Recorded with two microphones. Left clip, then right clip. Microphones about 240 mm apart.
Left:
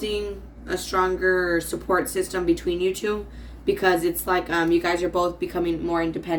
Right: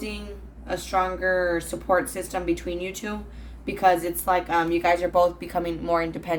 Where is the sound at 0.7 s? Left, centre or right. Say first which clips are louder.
Left 2 dB; centre.